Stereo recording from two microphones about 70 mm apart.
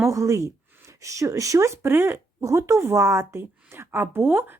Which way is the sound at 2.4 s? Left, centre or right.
Right.